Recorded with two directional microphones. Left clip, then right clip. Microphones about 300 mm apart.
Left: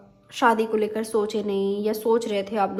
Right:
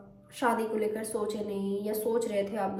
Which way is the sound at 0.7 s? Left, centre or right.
Centre.